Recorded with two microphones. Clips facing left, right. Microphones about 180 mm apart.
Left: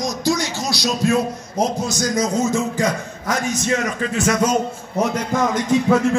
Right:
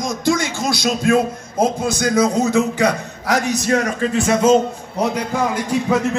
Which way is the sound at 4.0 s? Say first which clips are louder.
Right 3 dB; 30° right (ahead or behind).